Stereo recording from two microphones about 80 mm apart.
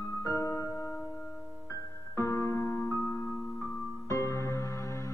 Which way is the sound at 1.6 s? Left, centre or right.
Left.